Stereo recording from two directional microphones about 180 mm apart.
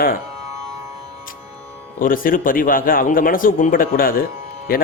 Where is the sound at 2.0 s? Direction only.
50° left (ahead or behind).